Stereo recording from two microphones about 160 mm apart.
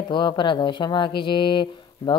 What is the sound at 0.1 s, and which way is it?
A woman's voice, 30° left (ahead or behind).